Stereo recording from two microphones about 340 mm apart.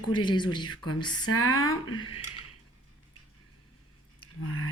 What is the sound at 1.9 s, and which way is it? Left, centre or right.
Speech, centre.